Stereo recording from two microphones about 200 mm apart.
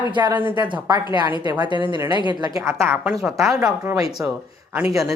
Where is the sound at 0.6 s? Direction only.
20° right (ahead or behind).